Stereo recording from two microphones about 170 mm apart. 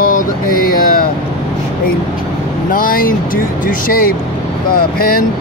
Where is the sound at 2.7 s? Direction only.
55° left (ahead or behind).